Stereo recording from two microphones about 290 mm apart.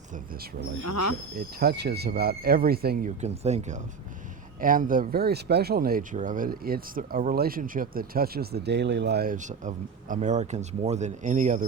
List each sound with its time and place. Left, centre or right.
0.9 s speech: left
1.4 s speech: right